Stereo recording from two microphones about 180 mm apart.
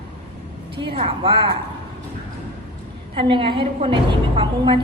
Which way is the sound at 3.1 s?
30° right (ahead or behind).